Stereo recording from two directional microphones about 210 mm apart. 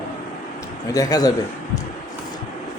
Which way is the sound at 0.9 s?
15° left (ahead or behind).